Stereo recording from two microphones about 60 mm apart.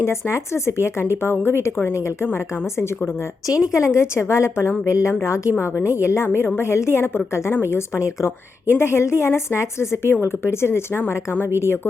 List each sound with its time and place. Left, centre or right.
0.0 s a woman's voice: left
3.8 s a woman's voice: left